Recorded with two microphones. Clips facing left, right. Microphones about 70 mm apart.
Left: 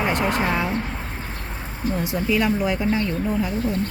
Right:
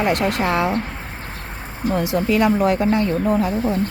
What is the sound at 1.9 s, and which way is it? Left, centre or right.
Speech, right.